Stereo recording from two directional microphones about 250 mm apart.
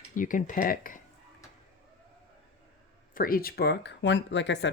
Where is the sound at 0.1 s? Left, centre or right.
Left.